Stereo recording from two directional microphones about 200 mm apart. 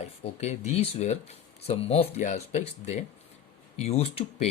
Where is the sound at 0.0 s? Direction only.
30° left (ahead or behind).